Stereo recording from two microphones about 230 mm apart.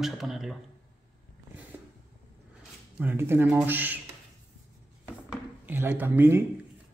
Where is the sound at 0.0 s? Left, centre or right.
Centre.